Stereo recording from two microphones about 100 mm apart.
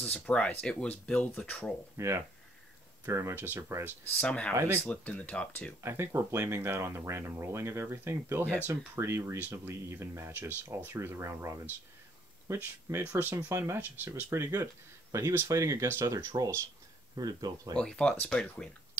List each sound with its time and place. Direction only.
0.0 s speech: 10° left (ahead or behind)
2.0 s speech: 30° right (ahead or behind)
4.2 s speech: 10° left (ahead or behind)
4.6 s speech: 25° right (ahead or behind)
4.8 s speech: 15° left (ahead or behind)
5.8 s speech: 25° right (ahead or behind)
17.2 s speech: 40° right (ahead or behind)
17.7 s speech: 10° left (ahead or behind)